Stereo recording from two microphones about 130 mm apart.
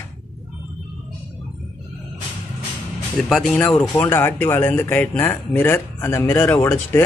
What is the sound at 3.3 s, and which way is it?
Speech, centre (ahead or behind).